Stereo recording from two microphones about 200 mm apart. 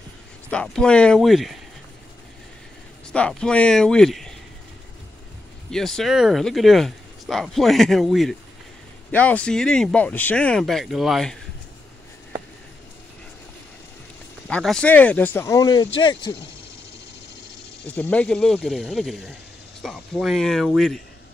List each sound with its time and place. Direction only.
0.5 s speech: 5° left (ahead or behind)
3.1 s speech: 5° left (ahead or behind)
5.7 s speech: 5° left (ahead or behind)
14.5 s speech: 5° left (ahead or behind); by 16.3 s 20° left (ahead or behind)
17.8 s speech: 10° left (ahead or behind)